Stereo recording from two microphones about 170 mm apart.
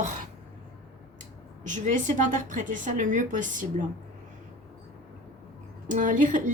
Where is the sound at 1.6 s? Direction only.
45° right (ahead or behind).